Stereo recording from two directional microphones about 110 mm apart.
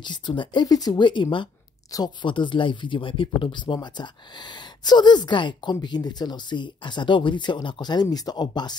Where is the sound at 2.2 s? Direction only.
45° left (ahead or behind).